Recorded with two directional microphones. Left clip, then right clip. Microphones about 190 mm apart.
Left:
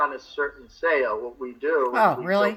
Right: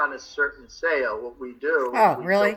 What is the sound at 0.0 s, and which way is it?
A man's voice, 15° right (ahead or behind).